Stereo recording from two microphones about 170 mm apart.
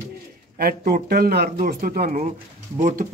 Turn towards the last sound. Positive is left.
turn(degrees=-45)  # may be behind; listen again after turning